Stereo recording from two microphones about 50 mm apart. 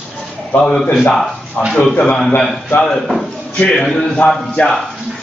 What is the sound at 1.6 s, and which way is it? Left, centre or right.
Speech, centre.